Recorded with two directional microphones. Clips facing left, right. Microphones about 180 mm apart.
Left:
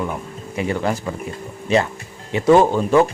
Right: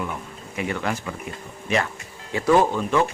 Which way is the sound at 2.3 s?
25° left (ahead or behind).